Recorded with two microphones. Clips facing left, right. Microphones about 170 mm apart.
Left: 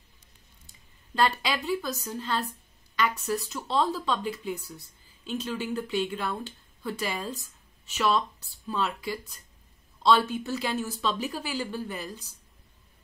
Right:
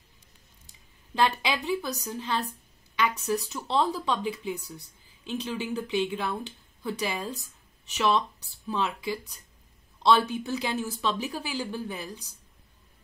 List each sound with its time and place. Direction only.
1.2 s speech: 15° right (ahead or behind)